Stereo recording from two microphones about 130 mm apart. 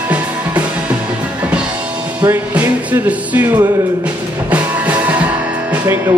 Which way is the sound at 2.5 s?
10° right (ahead or behind).